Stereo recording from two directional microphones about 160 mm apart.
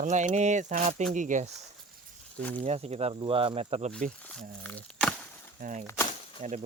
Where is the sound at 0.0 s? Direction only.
50° right (ahead or behind).